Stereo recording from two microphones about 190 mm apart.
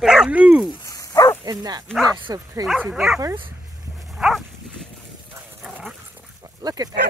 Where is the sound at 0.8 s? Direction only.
20° left (ahead or behind).